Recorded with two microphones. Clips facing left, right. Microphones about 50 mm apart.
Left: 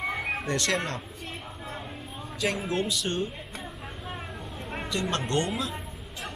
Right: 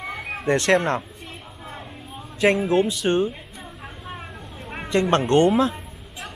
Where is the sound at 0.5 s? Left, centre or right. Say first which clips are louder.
Right 11 dB; right.